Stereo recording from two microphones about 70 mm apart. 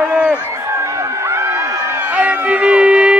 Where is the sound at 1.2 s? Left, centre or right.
Right.